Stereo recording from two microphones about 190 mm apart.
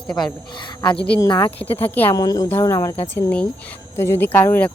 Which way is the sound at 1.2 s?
25° left (ahead or behind).